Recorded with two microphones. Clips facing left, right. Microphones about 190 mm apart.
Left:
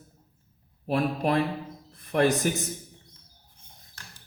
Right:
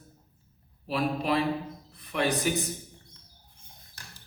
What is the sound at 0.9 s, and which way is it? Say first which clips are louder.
A man's voice: left 2 dB; 50° left (ahead or behind).